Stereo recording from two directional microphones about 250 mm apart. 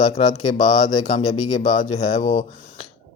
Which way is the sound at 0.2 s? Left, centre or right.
Left.